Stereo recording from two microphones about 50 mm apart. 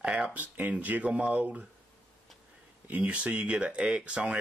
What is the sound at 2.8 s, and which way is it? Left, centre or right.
Speech, right.